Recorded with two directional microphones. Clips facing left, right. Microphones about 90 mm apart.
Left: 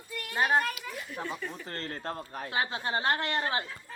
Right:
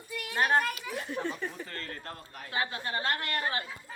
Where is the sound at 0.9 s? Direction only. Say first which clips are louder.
Right 5 dB; 25° right (ahead or behind).